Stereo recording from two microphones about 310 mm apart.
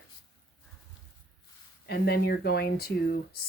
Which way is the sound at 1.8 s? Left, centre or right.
Left.